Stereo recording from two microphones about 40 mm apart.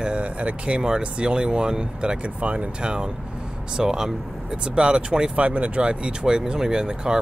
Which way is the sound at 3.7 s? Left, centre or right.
Centre.